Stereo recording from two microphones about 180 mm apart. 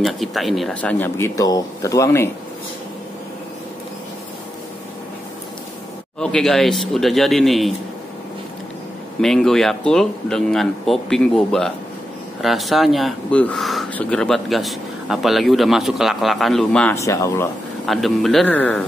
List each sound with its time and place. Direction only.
0.0 s speech: centre (ahead or behind); by 2.2 s 15° left (ahead or behind)
6.1 s speech: 5° left (ahead or behind)
9.2 s speech: centre (ahead or behind)
16.9 s speech: 15° left (ahead or behind)
17.8 s speech: centre (ahead or behind)